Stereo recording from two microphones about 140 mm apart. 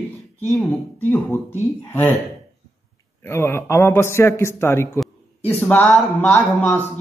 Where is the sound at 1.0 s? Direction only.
15° left (ahead or behind).